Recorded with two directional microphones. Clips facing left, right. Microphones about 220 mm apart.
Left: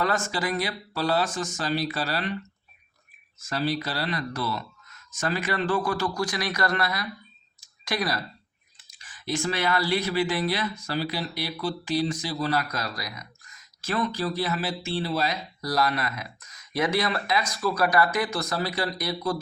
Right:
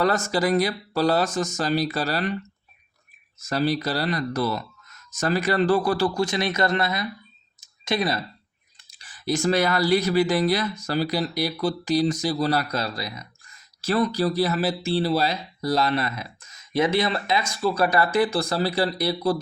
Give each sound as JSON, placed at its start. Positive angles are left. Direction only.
{"t": 0.0, "sound": "speech", "side_deg": -40}
{"t": 3.4, "sound": "speech", "side_deg": -40}
{"t": 7.6, "sound": "clicking", "side_deg": -25}
{"t": 8.9, "sound": "speech", "side_deg": -35}